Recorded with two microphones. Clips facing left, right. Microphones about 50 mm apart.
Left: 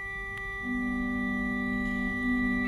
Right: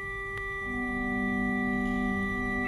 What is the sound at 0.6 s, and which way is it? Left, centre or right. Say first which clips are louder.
Organ: left 2 dB; right.